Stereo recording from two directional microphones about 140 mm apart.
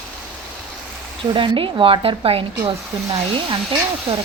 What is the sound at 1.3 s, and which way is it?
Speech, 35° right (ahead or behind).